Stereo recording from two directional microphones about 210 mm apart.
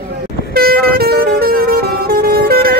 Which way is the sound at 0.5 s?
45° right (ahead or behind).